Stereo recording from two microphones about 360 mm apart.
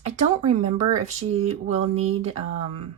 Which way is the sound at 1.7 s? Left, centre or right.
Centre.